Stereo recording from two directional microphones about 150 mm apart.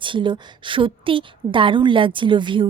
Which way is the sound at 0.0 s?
35° right (ahead or behind).